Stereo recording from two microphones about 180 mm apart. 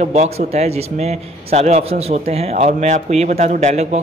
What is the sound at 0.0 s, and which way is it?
A man's voice, 40° right (ahead or behind).